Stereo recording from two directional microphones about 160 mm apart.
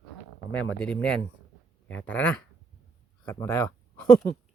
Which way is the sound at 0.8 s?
5° left (ahead or behind).